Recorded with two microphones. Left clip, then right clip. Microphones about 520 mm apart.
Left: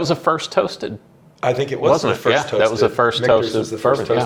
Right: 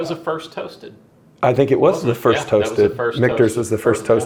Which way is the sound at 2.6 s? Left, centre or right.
Left.